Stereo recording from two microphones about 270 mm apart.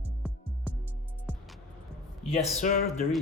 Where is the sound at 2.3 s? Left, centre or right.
Left.